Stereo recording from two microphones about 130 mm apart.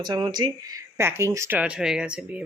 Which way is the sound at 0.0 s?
35° right (ahead or behind).